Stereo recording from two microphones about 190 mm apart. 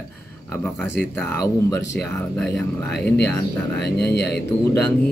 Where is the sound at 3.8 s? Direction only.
60° left (ahead or behind).